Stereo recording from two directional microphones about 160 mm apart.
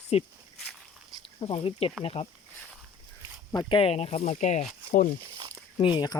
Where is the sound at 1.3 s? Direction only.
35° left (ahead or behind).